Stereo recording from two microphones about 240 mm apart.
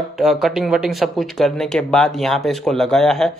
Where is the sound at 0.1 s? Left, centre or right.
Centre.